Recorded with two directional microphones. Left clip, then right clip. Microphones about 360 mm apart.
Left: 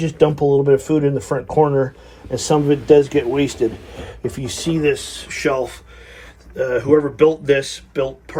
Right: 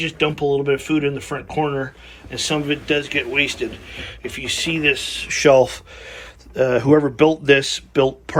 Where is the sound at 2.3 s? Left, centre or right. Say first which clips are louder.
Left 4 dB; centre.